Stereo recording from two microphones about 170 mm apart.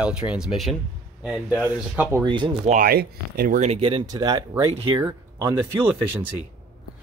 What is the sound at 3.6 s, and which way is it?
Speech, 35° right (ahead or behind).